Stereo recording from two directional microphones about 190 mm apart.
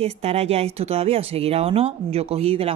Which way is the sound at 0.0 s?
30° right (ahead or behind).